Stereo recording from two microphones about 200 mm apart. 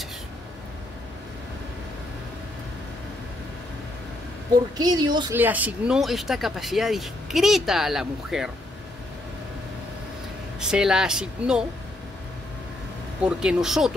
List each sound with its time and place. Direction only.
4.7 s speech: 20° right (ahead or behind)
5.3 s speech: 10° right (ahead or behind)
10.6 s speech: 5° right (ahead or behind)
13.2 s speech: 5° right (ahead or behind)